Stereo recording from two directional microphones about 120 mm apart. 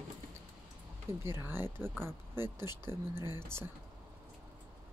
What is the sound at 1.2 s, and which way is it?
Speech, 20° right (ahead or behind).